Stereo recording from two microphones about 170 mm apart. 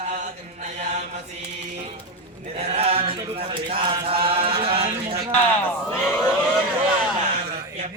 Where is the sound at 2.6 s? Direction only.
35° right (ahead or behind).